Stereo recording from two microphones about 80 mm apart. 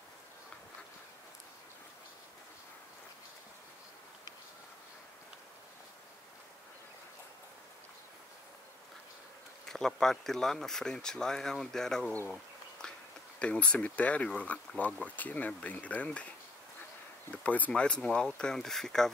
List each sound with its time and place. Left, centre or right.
9.7 s speech: centre
12.8 s a sound: centre
13.4 s speech: centre